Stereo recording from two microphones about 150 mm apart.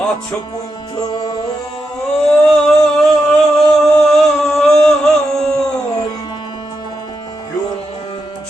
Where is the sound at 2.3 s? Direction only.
5° left (ahead or behind).